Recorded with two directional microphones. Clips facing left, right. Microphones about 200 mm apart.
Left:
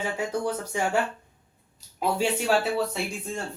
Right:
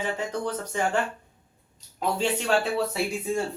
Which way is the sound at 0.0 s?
10° left (ahead or behind).